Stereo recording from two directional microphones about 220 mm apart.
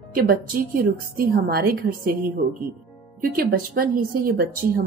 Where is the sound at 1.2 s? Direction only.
45° right (ahead or behind).